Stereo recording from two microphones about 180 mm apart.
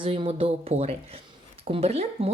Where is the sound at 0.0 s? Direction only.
30° right (ahead or behind).